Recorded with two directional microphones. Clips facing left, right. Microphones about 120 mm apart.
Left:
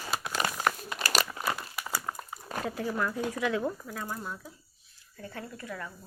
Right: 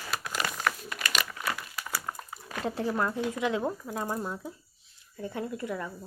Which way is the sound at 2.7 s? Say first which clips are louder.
Right 3 dB; 30° right (ahead or behind).